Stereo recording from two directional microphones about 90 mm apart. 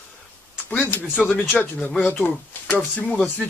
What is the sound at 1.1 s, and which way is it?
Speech, 5° left (ahead or behind).